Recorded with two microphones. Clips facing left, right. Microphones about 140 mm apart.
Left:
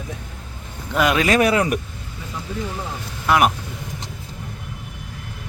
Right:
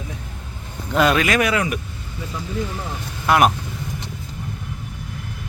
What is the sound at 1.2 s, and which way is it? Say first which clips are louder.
Speech: left 3 dB; 35° left (ahead or behind).